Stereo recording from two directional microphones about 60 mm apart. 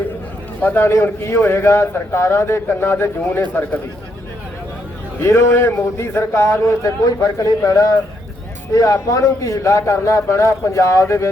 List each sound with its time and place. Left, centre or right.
0.6 s a man's voice: left
5.2 s a man's voice: left
6.8 s a man's voice: left